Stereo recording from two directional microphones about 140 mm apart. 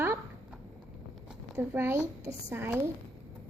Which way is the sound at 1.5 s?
15° right (ahead or behind).